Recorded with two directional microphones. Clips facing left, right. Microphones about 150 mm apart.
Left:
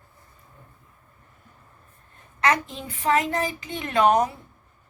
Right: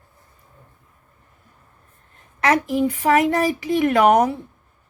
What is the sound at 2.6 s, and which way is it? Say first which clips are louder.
Speech: right 7 dB; 70° right (ahead or behind).